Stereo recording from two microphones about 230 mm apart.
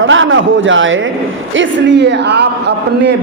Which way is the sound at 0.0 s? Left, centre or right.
Right.